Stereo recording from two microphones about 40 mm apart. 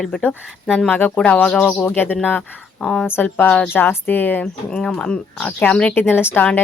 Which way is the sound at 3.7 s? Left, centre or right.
Left.